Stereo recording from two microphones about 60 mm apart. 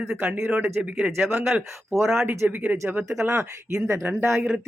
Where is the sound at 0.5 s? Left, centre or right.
Right.